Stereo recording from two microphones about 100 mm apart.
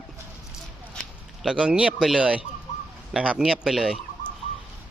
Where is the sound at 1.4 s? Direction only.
5° right (ahead or behind).